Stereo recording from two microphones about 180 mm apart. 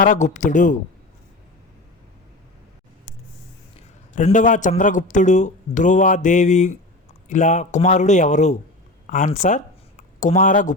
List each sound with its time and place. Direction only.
0.0 s a man's voice: 45° left (ahead or behind)
3.8 s a man's voice: 45° left (ahead or behind)